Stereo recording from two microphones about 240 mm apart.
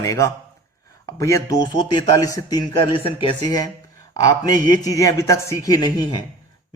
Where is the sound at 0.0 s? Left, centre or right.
Centre.